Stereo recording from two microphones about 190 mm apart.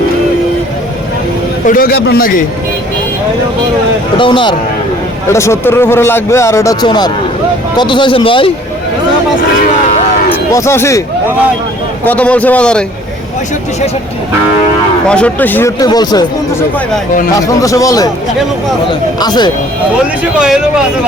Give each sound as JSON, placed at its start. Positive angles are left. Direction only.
{"t": 1.6, "sound": "a man's voice", "side_deg": 50}
{"t": 4.2, "sound": "speech", "side_deg": 25}
{"t": 5.3, "sound": "a man's voice", "side_deg": 15}
{"t": 10.5, "sound": "a man's voice", "side_deg": 15}
{"t": 12.0, "sound": "a man's voice", "side_deg": 10}
{"t": 15.1, "sound": "a man's voice", "side_deg": 5}
{"t": 19.2, "sound": "speech", "side_deg": 20}
{"t": 20.4, "sound": "speech", "side_deg": -5}